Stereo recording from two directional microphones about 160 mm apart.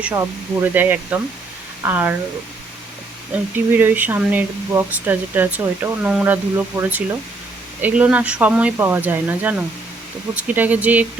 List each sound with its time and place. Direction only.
0.0 s speech: 15° right (ahead or behind)
3.5 s speech: 10° right (ahead or behind)